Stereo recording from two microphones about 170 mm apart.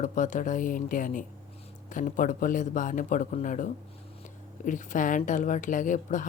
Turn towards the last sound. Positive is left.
turn(degrees=50)  # may be behind; listen again after turning